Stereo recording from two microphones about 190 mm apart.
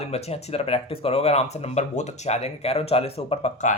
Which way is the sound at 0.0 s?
35° left (ahead or behind).